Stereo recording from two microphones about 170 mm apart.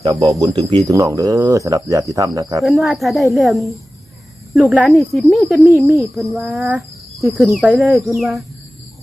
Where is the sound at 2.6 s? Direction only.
Centre (ahead or behind).